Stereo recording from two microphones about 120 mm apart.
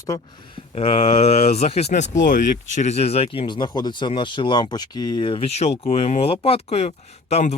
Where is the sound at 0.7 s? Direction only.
55° left (ahead or behind).